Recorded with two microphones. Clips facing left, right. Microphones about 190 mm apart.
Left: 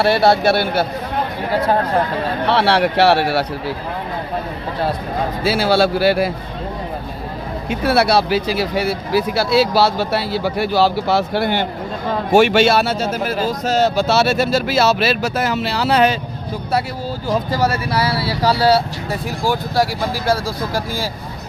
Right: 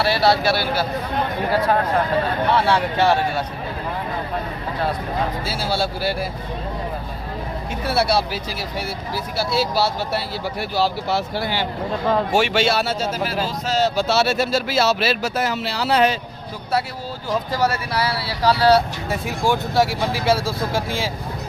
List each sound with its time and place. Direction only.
0.0 s speech: 55° left (ahead or behind)
2.5 s speech: 70° left (ahead or behind)
5.4 s speech: 75° left (ahead or behind)
7.7 s speech: 75° left (ahead or behind)
17.9 s speech: 5° left (ahead or behind)